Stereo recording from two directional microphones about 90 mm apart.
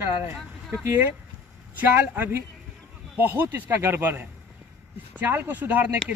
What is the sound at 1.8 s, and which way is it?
Speech, 25° right (ahead or behind).